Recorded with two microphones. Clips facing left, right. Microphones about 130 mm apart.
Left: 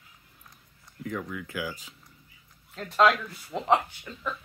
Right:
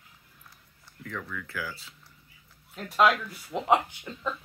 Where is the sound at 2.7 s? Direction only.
10° right (ahead or behind).